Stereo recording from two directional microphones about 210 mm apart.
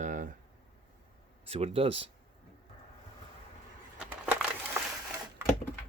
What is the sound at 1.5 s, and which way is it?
Speech, 30° right (ahead or behind).